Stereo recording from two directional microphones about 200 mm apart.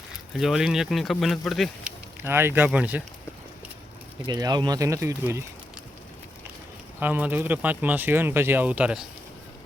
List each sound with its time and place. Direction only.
0.3 s speech: centre (ahead or behind)
2.2 s speech: 10° right (ahead or behind)
4.3 s speech: 20° right (ahead or behind)
7.0 s speech: 10° right (ahead or behind)